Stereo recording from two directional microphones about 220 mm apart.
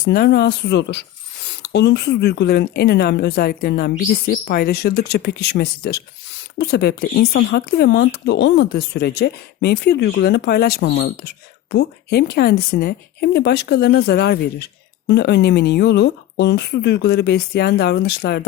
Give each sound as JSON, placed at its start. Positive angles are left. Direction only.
{"t": 0.0, "sound": "speech", "side_deg": 45}